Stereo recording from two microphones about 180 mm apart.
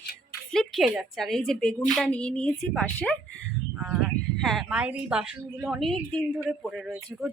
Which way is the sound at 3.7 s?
5° right (ahead or behind).